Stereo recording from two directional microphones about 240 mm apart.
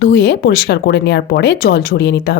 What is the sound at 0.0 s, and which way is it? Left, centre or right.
A woman's voice, left.